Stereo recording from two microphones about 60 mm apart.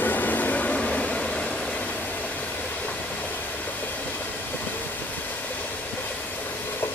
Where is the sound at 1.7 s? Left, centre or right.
Left.